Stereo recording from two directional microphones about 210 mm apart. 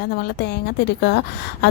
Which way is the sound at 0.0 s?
50° left (ahead or behind).